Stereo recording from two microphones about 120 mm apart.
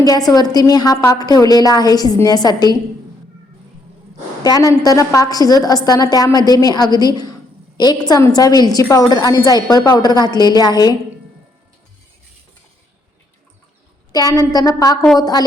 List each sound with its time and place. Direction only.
0.0 s a woman's voice: 30° left (ahead or behind)
4.4 s a woman's voice: 30° left (ahead or behind)
14.1 s a woman's voice: 30° left (ahead or behind)